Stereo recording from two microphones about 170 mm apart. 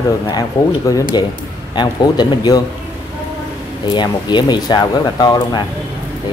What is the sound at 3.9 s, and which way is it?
Speech, 25° left (ahead or behind).